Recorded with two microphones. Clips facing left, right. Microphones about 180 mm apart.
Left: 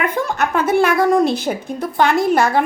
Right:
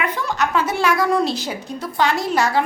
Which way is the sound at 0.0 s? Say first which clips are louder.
Left 3 dB; 50° left (ahead or behind).